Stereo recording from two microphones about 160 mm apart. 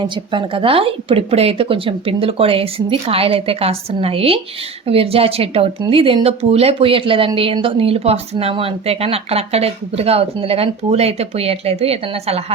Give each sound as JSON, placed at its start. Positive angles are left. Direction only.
{"t": 0.0, "sound": "speech", "side_deg": -30}